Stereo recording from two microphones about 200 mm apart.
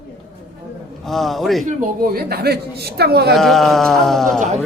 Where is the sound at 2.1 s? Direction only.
50° right (ahead or behind).